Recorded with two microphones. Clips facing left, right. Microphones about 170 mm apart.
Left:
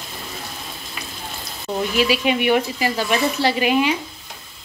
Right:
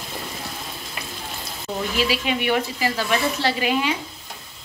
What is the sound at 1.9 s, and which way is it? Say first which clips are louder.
Stir: left 5 dB; 15° left (ahead or behind).